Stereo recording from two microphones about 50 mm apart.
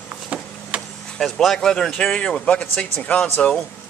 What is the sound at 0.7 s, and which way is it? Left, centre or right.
Vehicle, right.